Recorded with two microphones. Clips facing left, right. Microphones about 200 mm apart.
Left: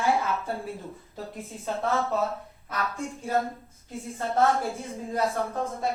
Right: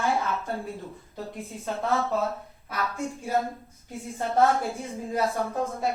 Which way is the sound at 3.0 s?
15° right (ahead or behind).